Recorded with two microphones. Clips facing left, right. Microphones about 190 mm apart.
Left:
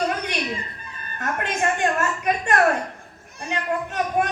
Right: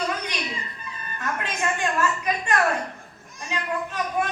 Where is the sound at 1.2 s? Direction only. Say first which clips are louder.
Left 4 dB; 50° left (ahead or behind).